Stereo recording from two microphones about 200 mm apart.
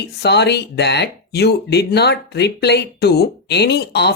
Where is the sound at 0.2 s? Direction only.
55° left (ahead or behind).